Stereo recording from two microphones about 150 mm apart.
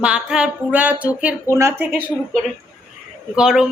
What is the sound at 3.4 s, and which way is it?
Speech, 5° right (ahead or behind).